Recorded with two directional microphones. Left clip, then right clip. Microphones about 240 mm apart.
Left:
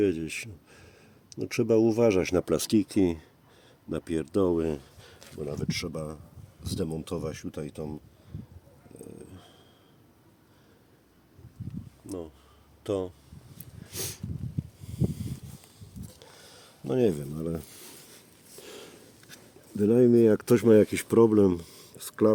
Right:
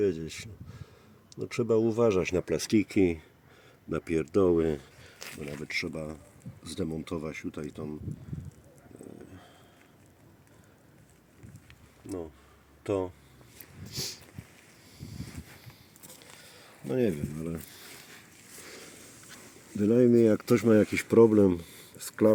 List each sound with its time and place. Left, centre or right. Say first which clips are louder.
0.0 s speech: left 2 dB; left
2.6 s speech: even; centre
5.2 s a sound: right 10 dB; right
5.5 s speech: right 3 dB; centre
12.0 s speech: right 1 dB; centre
13.9 s a sound: even; left
16.4 s a sound: left 4 dB; left
19.7 s speech: left 2 dB; left
20.7 s speech: left 4 dB; centre